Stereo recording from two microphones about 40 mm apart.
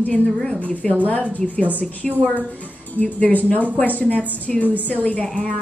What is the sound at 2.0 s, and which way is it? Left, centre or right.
Speech, left.